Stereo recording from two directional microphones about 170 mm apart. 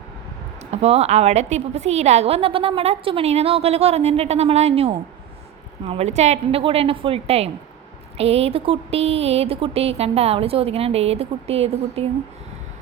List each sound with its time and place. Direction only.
0.7 s a woman's voice: 40° right (ahead or behind)